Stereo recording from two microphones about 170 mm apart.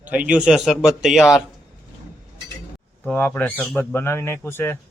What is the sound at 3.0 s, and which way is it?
Speech, 10° left (ahead or behind).